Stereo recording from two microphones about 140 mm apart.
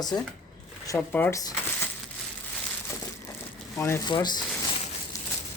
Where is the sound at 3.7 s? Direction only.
20° left (ahead or behind).